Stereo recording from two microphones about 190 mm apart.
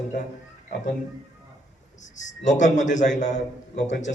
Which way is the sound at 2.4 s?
40° left (ahead or behind).